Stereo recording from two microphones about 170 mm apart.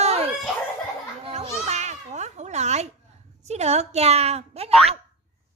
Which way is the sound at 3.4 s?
40° right (ahead or behind).